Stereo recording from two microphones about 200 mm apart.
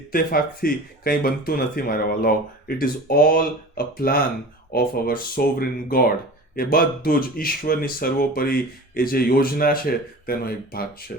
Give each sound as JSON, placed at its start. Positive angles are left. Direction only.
{"t": 0.1, "sound": "speech", "side_deg": 45}